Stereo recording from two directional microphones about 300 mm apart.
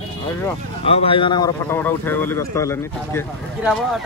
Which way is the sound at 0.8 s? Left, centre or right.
Centre.